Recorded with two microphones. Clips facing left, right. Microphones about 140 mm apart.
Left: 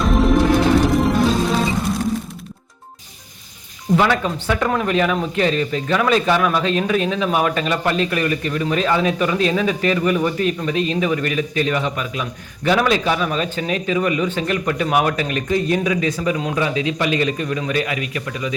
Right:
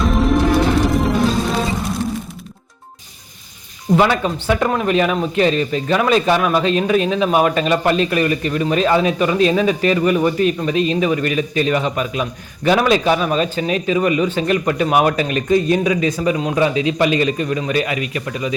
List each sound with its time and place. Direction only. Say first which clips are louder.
0.0 s music: even; centre (ahead or behind)
4.1 s speech: right 2 dB; 25° right (ahead or behind)